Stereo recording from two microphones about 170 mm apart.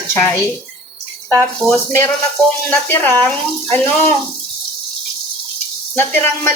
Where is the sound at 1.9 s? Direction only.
15° left (ahead or behind).